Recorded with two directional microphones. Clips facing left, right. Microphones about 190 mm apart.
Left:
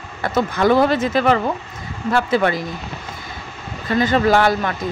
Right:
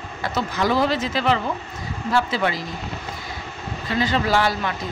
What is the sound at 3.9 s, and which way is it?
Speech, 50° left (ahead or behind).